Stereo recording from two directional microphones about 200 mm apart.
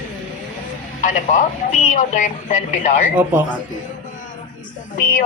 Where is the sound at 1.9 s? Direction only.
40° left (ahead or behind).